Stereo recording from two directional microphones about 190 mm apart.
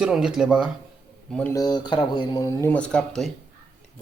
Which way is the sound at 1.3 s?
10° left (ahead or behind).